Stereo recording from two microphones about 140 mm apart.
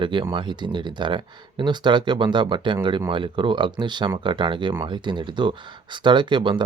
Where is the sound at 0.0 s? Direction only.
35° right (ahead or behind).